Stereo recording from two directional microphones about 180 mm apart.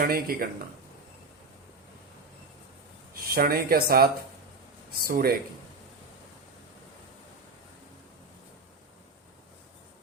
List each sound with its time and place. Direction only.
0.0 s speech: 55° right (ahead or behind)
3.3 s speech: 55° right (ahead or behind)